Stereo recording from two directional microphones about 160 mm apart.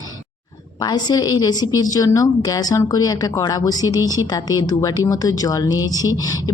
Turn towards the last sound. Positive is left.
turn(degrees=25)  # may be behind; listen again after turning